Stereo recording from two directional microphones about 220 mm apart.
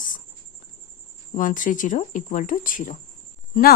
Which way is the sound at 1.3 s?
35° left (ahead or behind).